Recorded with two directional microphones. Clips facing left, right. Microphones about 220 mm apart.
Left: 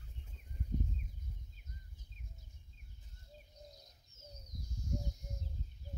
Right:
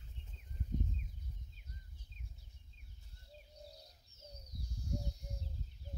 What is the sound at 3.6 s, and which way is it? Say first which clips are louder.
Bird: right 2 dB; 35° right (ahead or behind).